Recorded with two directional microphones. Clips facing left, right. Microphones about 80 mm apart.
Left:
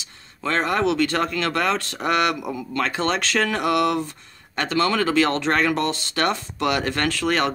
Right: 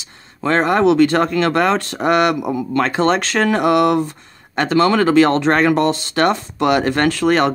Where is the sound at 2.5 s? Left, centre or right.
Right.